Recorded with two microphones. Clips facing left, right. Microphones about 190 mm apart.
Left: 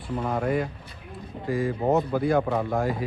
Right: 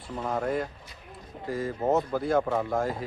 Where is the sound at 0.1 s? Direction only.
10° left (ahead or behind).